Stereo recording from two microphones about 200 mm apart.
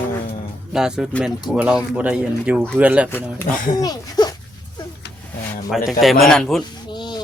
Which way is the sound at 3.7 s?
20° left (ahead or behind).